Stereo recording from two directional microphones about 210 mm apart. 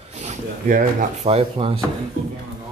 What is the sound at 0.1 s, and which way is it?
Speech, 35° right (ahead or behind).